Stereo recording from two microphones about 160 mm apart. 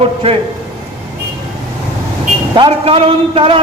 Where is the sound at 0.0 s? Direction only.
35° right (ahead or behind).